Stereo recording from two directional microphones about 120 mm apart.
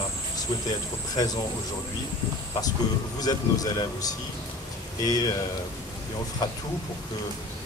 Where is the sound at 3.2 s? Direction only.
35° left (ahead or behind).